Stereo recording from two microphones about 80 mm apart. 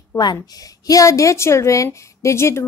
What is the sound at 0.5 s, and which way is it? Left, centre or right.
A woman's voice, left.